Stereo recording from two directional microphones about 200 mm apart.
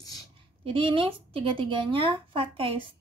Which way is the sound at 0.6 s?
25° right (ahead or behind).